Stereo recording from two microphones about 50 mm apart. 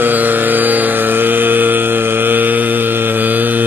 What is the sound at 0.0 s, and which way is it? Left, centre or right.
Carnatic music, right.